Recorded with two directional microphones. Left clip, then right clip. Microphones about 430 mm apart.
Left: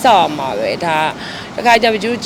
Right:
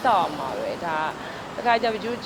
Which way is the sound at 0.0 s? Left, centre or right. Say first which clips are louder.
Left 10 dB; left.